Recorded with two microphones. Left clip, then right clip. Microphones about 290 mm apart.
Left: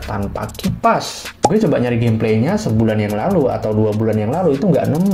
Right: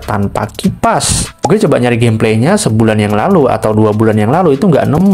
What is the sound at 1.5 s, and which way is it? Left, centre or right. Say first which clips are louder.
Speech: right 6 dB; right.